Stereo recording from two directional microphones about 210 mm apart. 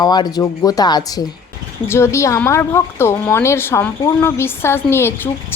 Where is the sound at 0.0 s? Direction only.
20° left (ahead or behind).